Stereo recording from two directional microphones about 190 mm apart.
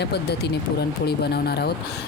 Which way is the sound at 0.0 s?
60° left (ahead or behind).